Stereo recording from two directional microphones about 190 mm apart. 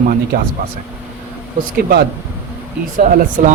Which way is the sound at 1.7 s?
55° right (ahead or behind).